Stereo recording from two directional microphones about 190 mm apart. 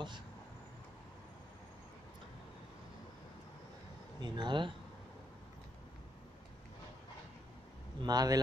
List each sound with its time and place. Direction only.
4.2 s speech: 25° right (ahead or behind)
8.0 s speech: 20° right (ahead or behind)